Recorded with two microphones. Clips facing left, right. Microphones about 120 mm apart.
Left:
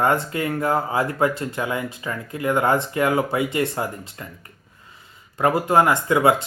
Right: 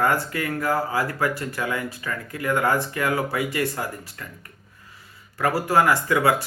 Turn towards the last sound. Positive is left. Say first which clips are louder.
# left 3 dB
turn(degrees=20)  # may be behind; listen again after turning